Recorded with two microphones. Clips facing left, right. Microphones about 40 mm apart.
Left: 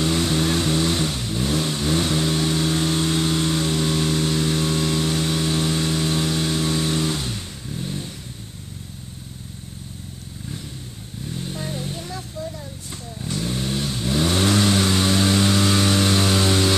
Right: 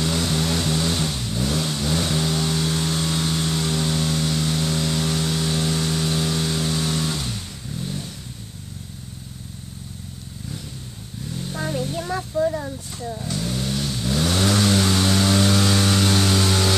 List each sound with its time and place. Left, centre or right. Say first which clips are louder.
0.0 s vehicle: left 2 dB; centre
11.5 s music: right 7 dB; right
13.5 s vehicle: left 1 dB; left